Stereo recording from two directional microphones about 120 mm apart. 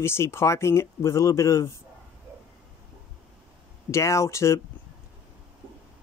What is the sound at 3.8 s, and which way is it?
Speech, 25° left (ahead or behind).